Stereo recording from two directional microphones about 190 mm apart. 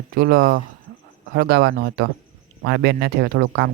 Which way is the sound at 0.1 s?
50° right (ahead or behind).